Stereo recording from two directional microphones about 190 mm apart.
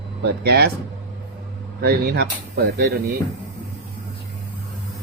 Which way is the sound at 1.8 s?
55° right (ahead or behind).